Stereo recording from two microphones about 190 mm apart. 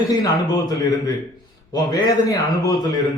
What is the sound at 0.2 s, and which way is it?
A man's voice, 20° left (ahead or behind).